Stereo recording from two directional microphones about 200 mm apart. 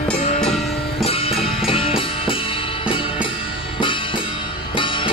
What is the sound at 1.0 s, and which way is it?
Music, 30° left (ahead or behind).